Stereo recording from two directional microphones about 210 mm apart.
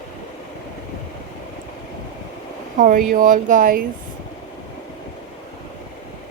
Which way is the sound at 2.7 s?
40° right (ahead or behind).